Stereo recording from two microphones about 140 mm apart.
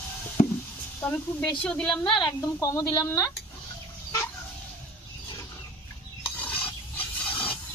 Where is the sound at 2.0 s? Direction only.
30° left (ahead or behind).